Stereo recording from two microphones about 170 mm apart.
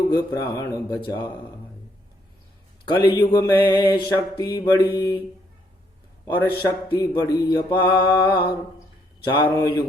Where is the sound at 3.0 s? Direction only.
30° left (ahead or behind).